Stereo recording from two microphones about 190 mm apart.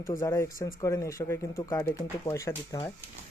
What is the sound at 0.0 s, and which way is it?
Speech, 15° left (ahead or behind).